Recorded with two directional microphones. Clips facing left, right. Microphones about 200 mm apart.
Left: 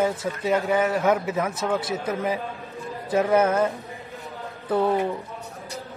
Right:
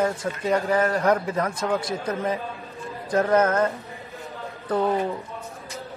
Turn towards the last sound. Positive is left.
turn(degrees=5)  # may be behind; listen again after turning